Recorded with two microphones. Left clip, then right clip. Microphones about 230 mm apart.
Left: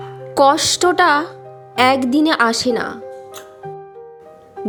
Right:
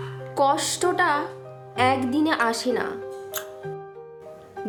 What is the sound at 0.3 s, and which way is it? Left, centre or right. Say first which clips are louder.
Speech: left 9 dB; left.